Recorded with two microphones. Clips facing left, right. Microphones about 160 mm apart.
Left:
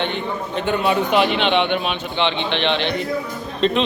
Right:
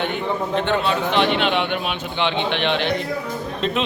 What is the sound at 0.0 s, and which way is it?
Speech, 5° right (ahead or behind).